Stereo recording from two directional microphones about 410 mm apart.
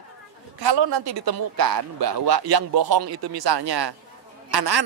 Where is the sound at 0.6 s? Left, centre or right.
Right.